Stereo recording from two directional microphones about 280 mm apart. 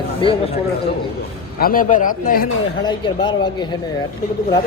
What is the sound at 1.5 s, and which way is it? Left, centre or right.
Speech, left.